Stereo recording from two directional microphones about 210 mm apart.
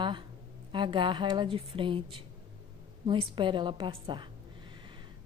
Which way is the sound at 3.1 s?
25° right (ahead or behind).